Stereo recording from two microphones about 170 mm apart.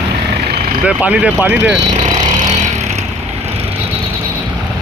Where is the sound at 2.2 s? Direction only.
45° right (ahead or behind).